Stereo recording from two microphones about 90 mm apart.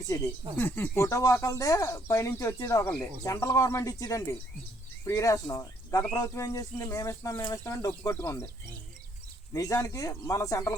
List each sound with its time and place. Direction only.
0.5 s speech: 25° left (ahead or behind)
0.9 s speech: 35° left (ahead or behind)
9.5 s speech: 40° left (ahead or behind)